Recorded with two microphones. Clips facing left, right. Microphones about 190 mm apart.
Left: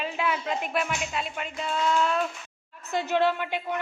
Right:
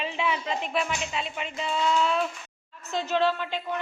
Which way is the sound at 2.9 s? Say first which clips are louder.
Left 1 dB; 15° left (ahead or behind).